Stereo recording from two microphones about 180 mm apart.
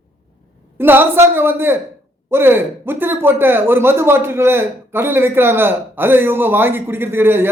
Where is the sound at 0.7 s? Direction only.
10° right (ahead or behind).